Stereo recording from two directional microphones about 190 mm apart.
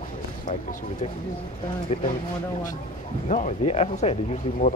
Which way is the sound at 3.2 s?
40° left (ahead or behind).